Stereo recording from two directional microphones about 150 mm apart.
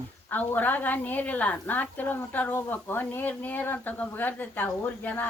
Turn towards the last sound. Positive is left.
turn(degrees=10)  # may be behind; listen again after turning